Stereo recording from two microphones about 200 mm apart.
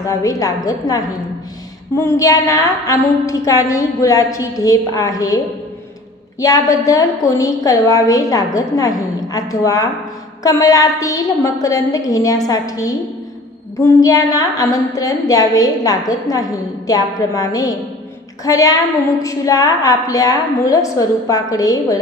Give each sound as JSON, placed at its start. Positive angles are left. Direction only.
{"t": 0.0, "sound": "a woman's voice", "side_deg": 15}
{"t": 6.4, "sound": "a woman's voice", "side_deg": 15}